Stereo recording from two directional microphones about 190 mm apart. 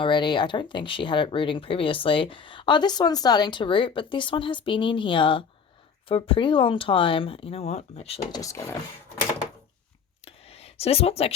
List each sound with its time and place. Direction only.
0.0 s speech: 25° left (ahead or behind)
8.3 s speech: 15° left (ahead or behind)
10.2 s a sound: 30° left (ahead or behind)